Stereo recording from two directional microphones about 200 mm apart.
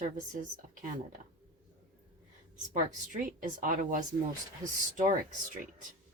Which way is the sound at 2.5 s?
40° right (ahead or behind).